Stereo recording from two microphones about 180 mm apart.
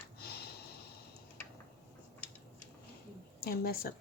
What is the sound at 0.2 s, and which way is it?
Sniff, 60° left (ahead or behind).